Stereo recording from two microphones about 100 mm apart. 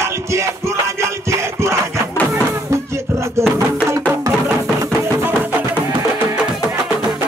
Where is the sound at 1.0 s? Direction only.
30° right (ahead or behind).